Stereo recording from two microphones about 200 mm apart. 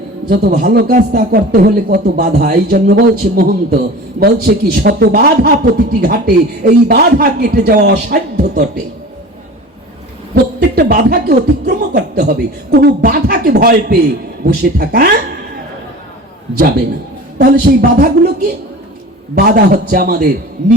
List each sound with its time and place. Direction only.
0.3 s speech: 45° right (ahead or behind)
10.3 s speech: 50° right (ahead or behind)
17.3 s speech: 50° right (ahead or behind)
19.4 s speech: 50° right (ahead or behind)